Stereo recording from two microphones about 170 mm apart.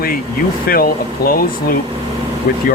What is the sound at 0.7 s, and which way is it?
Speech, 60° left (ahead or behind).